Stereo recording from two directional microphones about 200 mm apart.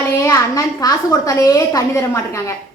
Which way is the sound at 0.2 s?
15° left (ahead or behind).